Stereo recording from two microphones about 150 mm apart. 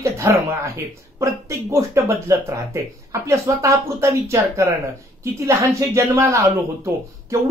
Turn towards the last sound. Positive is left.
turn(degrees=-20)  # may be behind; listen again after turning